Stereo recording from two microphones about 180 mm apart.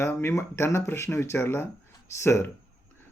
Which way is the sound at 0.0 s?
15° left (ahead or behind).